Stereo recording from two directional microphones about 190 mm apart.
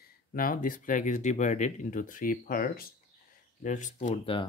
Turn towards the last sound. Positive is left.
turn(degrees=40)  # may be behind; listen again after turning